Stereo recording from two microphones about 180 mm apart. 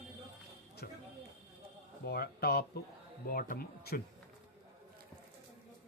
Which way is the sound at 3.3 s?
55° left (ahead or behind).